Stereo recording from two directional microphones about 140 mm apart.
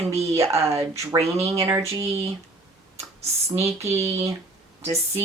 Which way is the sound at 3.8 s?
20° right (ahead or behind).